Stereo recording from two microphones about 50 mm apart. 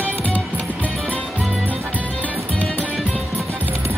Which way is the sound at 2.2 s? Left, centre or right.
Left.